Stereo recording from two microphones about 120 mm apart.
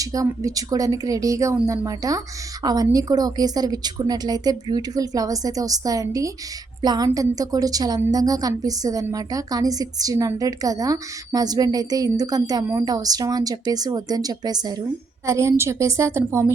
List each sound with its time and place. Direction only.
0.0 s a woman's voice: 30° right (ahead or behind)
15.3 s a woman's voice: 25° right (ahead or behind)